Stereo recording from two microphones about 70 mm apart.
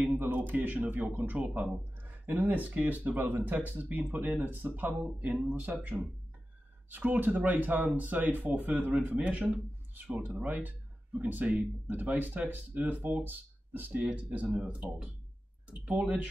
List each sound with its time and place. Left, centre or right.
0.0 s speech: right